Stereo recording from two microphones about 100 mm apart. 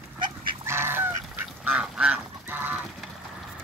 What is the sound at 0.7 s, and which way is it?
Goose, 25° right (ahead or behind).